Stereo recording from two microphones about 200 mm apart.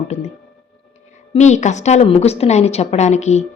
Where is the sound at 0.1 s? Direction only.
35° left (ahead or behind).